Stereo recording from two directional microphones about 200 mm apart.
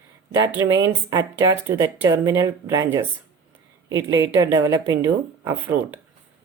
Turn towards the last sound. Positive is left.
turn(degrees=-10)  # may be behind; listen again after turning